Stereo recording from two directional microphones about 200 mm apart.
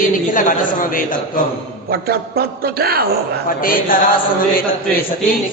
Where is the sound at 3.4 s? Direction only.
45° left (ahead or behind).